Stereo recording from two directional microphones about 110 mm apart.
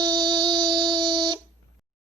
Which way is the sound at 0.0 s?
40° right (ahead or behind).